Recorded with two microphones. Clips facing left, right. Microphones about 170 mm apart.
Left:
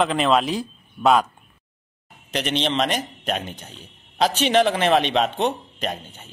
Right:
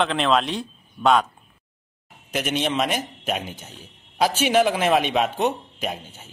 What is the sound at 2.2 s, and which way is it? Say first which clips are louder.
A man's voice: left 1 dB; 5° right (ahead or behind).